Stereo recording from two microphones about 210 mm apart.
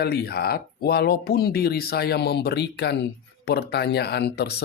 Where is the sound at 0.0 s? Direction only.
50° left (ahead or behind).